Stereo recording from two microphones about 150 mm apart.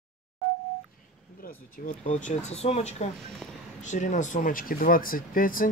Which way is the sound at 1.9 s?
60° left (ahead or behind).